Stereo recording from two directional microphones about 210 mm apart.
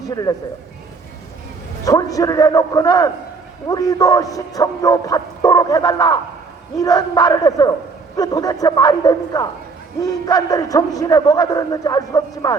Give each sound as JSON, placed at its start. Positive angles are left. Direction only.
{"t": 0.1, "sound": "a man's voice", "side_deg": 15}
{"t": 1.8, "sound": "a man's voice", "side_deg": 15}